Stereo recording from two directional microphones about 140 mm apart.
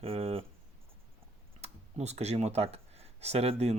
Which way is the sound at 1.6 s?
50° right (ahead or behind).